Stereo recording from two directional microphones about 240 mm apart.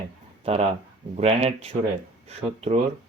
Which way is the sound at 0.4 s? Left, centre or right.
Right.